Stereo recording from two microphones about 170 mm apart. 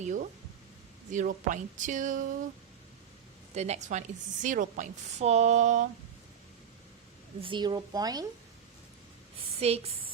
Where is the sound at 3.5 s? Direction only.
40° right (ahead or behind).